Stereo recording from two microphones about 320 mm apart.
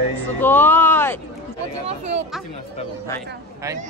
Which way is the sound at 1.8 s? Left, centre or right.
Centre.